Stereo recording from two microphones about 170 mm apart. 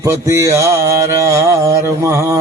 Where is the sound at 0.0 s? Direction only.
15° right (ahead or behind).